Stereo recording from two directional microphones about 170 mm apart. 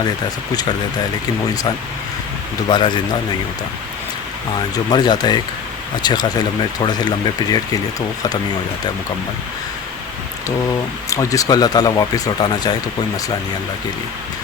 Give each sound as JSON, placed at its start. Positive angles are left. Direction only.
{"t": 2.6, "sound": "speech", "side_deg": 25}
{"t": 4.7, "sound": "speech", "side_deg": 25}
{"t": 11.1, "sound": "speech", "side_deg": 20}